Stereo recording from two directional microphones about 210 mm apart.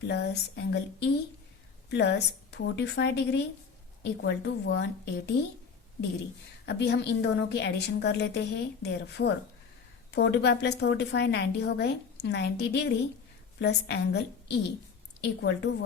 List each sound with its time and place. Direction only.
0.1 s a woman's voice: 55° left (ahead or behind)
6.7 s a woman's voice: 50° left (ahead or behind)